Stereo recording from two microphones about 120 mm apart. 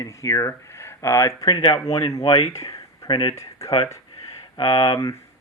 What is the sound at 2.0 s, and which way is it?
Speech, 25° left (ahead or behind).